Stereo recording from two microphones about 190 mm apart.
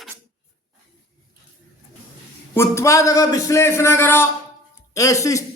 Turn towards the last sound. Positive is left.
turn(degrees=15)  # may be behind; listen again after turning